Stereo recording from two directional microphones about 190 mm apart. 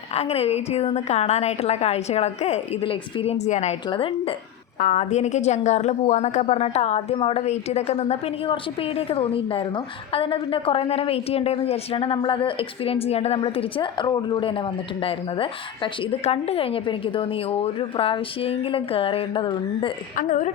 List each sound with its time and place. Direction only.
0.1 s a woman's voice: 35° left (ahead or behind)
4.8 s a woman's voice: 40° left (ahead or behind)
20.1 s a woman's voice: 40° left (ahead or behind)